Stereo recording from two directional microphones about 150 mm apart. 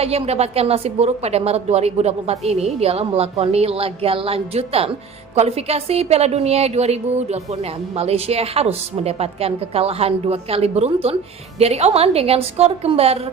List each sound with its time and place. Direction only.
0.0 s a woman's voice: 45° right (ahead or behind)